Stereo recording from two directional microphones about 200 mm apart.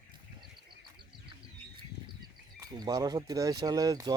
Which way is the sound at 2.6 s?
20° right (ahead or behind).